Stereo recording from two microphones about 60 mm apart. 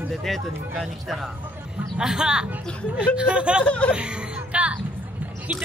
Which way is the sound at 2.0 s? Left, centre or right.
Centre.